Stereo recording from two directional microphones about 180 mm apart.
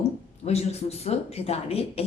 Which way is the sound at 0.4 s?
35° left (ahead or behind).